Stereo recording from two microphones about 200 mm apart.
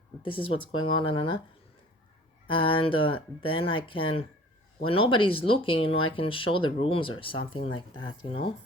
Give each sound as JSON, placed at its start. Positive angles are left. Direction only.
{"t": 0.2, "sound": "speech", "side_deg": 25}
{"t": 2.5, "sound": "speech", "side_deg": 25}